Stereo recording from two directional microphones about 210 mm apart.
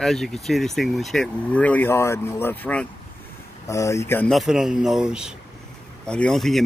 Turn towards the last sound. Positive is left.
turn(degrees=0)  # may be behind; listen again after turning